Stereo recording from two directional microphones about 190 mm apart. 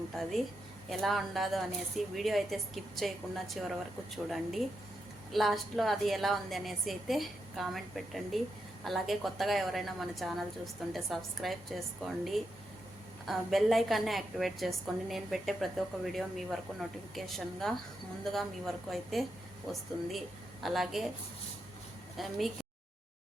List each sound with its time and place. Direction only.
0.2 s a woman's voice: centre (ahead or behind)
5.3 s a woman's voice: centre (ahead or behind)
22.2 s a woman's voice: centre (ahead or behind)